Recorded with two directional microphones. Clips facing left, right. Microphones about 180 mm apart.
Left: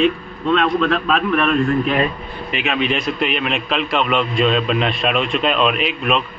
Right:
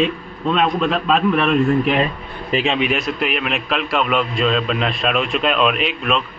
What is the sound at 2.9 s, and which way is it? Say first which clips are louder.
A man's voice: left 1 dB; 5° right (ahead or behind).